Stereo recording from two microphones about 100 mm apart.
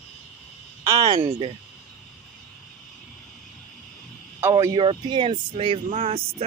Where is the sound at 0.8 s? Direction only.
40° right (ahead or behind).